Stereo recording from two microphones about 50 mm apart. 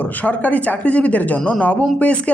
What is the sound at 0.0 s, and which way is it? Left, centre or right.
A woman's voice, left.